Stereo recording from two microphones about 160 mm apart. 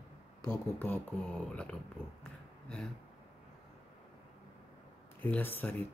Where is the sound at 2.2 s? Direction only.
5° left (ahead or behind).